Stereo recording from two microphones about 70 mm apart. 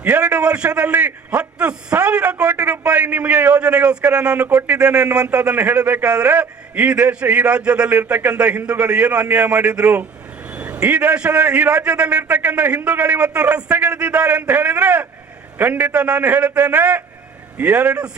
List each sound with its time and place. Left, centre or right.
0.0 s a man's voice: right